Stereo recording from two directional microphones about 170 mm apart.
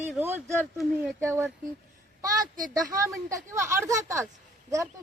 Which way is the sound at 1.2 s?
15° right (ahead or behind).